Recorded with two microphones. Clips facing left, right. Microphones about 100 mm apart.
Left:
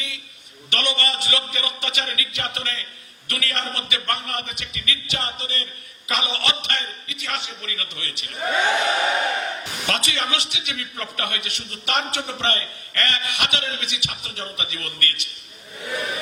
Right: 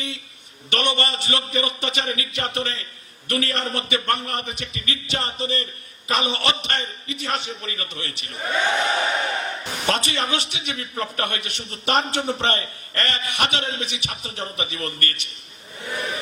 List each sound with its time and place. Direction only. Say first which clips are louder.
0.7 s a man's voice: right 2 dB; 35° right (ahead or behind)